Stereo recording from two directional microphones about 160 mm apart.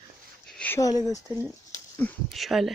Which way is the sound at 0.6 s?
15° left (ahead or behind).